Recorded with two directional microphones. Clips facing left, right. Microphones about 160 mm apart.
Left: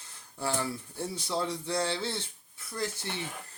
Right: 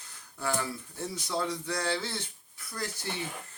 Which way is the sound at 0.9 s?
30° left (ahead or behind).